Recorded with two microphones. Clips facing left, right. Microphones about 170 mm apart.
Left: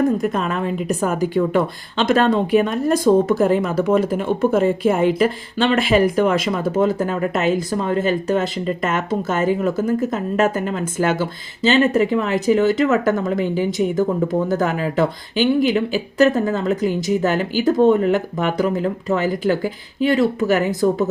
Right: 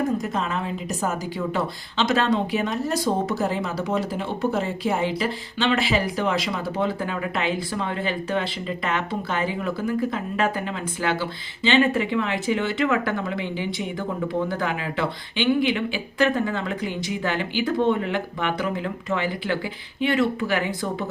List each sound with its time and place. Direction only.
0.2 s a woman's voice: 55° left (ahead or behind)